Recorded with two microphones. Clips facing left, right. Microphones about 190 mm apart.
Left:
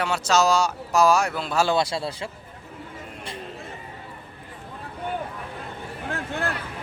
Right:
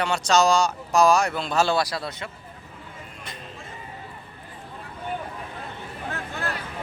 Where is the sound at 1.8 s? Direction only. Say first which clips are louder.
Left 2 dB; 25° left (ahead or behind).